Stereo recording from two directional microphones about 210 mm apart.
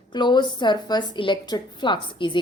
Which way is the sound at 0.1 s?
20° left (ahead or behind).